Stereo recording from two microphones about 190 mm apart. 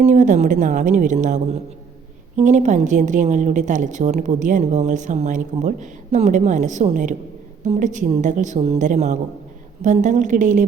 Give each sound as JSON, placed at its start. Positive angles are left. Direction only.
{"t": 0.0, "sound": "a woman's voice", "side_deg": -40}